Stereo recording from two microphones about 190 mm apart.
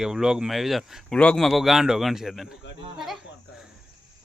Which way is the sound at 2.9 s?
Centre (ahead or behind).